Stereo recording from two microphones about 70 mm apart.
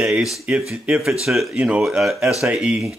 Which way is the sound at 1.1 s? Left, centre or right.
Centre.